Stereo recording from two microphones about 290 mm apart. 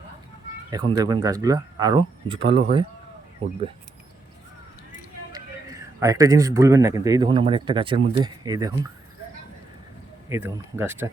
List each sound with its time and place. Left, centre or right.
0.7 s speech: centre
5.3 s a man's voice: centre
10.2 s speech: centre